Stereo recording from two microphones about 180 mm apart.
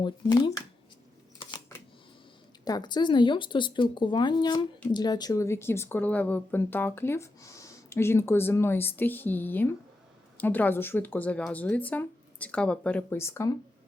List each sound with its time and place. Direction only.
0.0 s speech: 25° left (ahead or behind)
1.4 s camera: 25° left (ahead or behind)
2.6 s speech: 20° left (ahead or behind)